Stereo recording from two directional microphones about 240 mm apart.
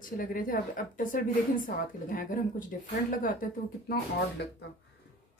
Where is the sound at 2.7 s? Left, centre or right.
Left.